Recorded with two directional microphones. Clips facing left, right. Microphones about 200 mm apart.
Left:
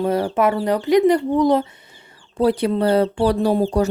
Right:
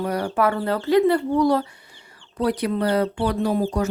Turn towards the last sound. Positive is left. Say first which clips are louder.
# left 4 dB
turn(degrees=30)  # may be behind; listen again after turning